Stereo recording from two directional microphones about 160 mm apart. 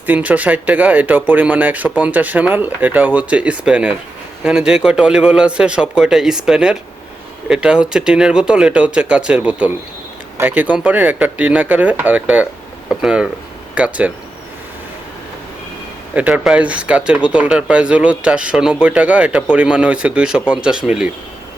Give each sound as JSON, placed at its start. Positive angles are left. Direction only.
{"t": 0.0, "sound": "a man's voice", "side_deg": -10}
{"t": 16.1, "sound": "speech", "side_deg": -10}